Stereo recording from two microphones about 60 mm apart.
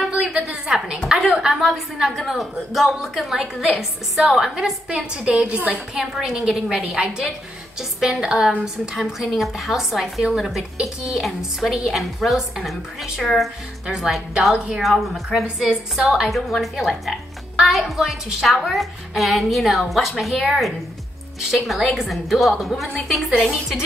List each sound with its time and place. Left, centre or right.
0.1 s a sound: centre
1.0 s a woman's voice: centre
4.8 s a woman's voice: centre
5.9 s a woman's voice: centre
13.2 s a woman's voice: centre
13.8 s a woman's voice: centre
14.8 s a woman's voice: centre
15.4 s a woman's voice: centre
16.3 s a woman's voice: centre